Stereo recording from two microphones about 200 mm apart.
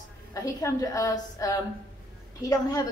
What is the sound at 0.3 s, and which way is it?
A woman's voice, 15° left (ahead or behind).